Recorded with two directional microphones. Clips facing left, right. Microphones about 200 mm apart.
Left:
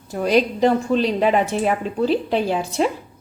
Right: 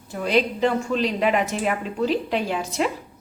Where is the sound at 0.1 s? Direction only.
40° left (ahead or behind).